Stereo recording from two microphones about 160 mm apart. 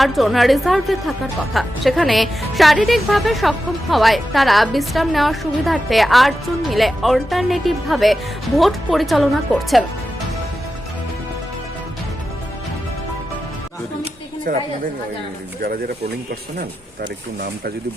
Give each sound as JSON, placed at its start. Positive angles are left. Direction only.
{"t": 0.0, "sound": "a woman's voice", "side_deg": 0}
{"t": 14.5, "sound": "a woman's voice", "side_deg": -60}